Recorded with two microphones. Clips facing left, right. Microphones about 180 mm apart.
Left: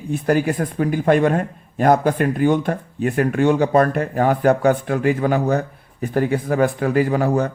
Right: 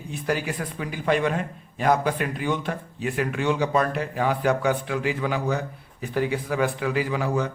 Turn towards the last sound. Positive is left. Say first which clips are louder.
# left 7 dB
turn(degrees=50)  # may be behind; listen again after turning